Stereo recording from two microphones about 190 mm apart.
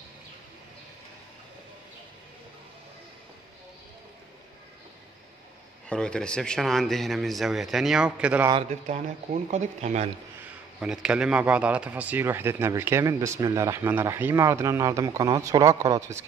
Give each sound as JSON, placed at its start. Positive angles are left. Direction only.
{"t": 5.9, "sound": "speech", "side_deg": 5}
{"t": 8.5, "sound": "a man's voice", "side_deg": -30}
{"t": 10.8, "sound": "speech", "side_deg": -5}